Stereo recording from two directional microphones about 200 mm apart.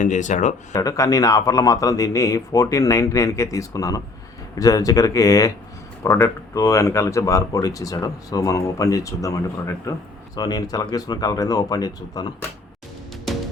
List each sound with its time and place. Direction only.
0.0 s speech: 40° left (ahead or behind)
0.7 s speech: 15° left (ahead or behind)